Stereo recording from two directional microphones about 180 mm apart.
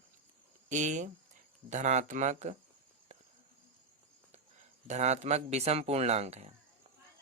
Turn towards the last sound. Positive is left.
turn(degrees=-35)  # may be behind; listen again after turning